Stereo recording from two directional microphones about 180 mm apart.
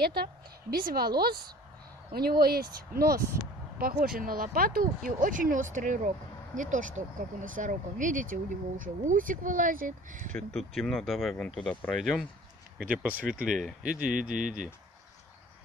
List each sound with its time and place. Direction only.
0.0 s a woman's voice: 60° right (ahead or behind)
2.1 s a woman's voice: 60° right (ahead or behind)
10.3 s speech: 5° left (ahead or behind)
14.1 s speech: 45° right (ahead or behind)